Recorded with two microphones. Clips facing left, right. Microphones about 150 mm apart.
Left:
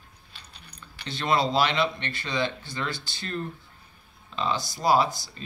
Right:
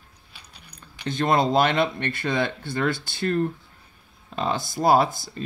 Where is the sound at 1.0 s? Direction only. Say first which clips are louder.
Right 4 dB; 50° right (ahead or behind).